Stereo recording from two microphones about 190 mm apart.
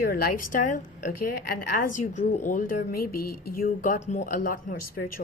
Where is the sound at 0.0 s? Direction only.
50° left (ahead or behind).